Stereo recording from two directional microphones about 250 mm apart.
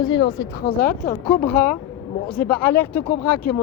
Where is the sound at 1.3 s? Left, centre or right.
Centre.